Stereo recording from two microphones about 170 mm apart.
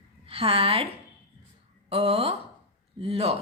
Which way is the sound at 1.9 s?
35° right (ahead or behind).